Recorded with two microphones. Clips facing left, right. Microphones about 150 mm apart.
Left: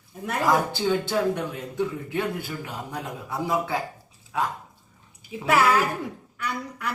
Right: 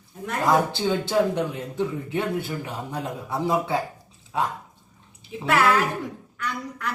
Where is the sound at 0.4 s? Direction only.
20° right (ahead or behind).